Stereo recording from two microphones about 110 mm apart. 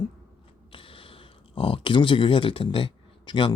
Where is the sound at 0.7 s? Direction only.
55° left (ahead or behind).